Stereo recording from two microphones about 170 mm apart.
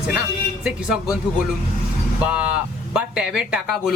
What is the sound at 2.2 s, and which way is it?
Speech, 5° right (ahead or behind).